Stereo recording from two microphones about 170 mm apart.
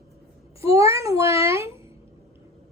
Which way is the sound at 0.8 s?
15° right (ahead or behind).